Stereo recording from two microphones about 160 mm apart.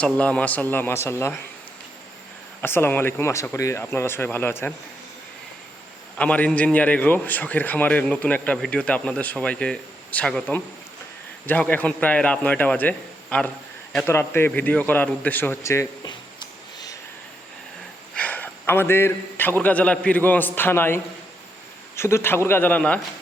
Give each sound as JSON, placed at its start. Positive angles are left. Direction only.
{"t": 0.0, "sound": "a man's voice", "side_deg": 10}
{"t": 2.6, "sound": "a man's voice", "side_deg": 15}
{"t": 6.1, "sound": "a man's voice", "side_deg": 10}
{"t": 16.7, "sound": "a sound", "side_deg": 25}
{"t": 18.1, "sound": "a man's voice", "side_deg": 10}